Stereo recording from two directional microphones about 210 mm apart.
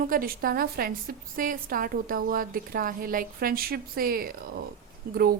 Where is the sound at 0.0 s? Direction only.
45° right (ahead or behind).